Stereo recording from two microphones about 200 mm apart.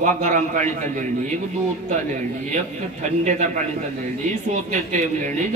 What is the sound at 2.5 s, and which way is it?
Speech, 35° right (ahead or behind).